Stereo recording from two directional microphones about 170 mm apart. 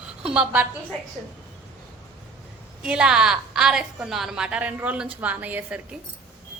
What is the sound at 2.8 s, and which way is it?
A woman's voice, 5° right (ahead or behind).